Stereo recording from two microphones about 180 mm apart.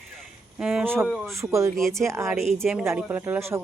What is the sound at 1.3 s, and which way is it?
Speech, 15° right (ahead or behind).